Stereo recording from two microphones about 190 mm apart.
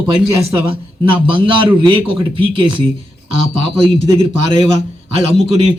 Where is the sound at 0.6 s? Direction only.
25° right (ahead or behind).